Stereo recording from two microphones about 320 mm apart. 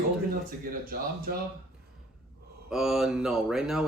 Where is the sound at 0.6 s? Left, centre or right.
Right.